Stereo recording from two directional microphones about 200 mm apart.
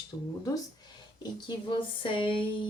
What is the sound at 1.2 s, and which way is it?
A woman's voice, 25° left (ahead or behind).